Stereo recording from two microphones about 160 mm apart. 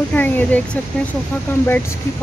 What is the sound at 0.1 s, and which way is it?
Speech, 10° left (ahead or behind).